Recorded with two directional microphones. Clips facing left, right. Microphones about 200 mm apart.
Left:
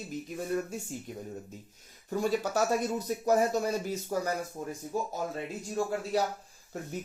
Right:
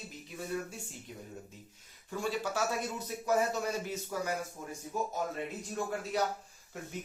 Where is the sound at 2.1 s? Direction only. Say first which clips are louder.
Left 5 dB; 40° left (ahead or behind).